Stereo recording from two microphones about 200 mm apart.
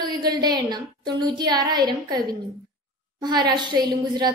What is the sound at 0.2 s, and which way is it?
A woman's voice, 20° right (ahead or behind).